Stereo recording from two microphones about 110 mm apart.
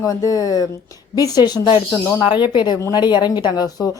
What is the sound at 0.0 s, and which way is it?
A woman's voice, 30° left (ahead or behind).